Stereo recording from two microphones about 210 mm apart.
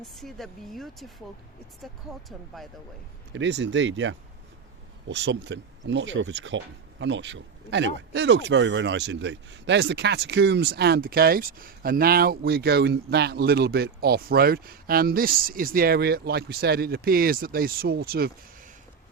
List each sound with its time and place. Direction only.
0.0 s speech: centre (ahead or behind)
2.3 s speech: centre (ahead or behind)
3.3 s speech: 55° right (ahead or behind)